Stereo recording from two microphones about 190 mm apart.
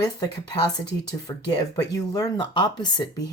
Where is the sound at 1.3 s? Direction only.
20° left (ahead or behind).